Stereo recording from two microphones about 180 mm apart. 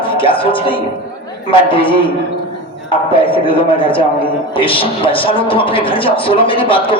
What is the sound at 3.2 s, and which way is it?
A man's voice, 30° left (ahead or behind).